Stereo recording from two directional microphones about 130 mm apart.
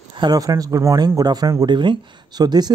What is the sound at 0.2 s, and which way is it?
Speech, 30° right (ahead or behind).